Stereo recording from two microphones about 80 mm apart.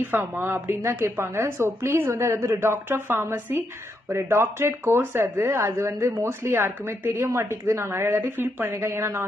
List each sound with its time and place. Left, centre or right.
0.0 s speech: right